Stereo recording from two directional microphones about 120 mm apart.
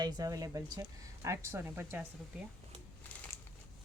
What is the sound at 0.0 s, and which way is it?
Speech, 30° right (ahead or behind).